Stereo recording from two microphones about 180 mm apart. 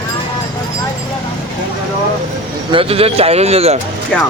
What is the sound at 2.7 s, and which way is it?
Speech, 30° right (ahead or behind).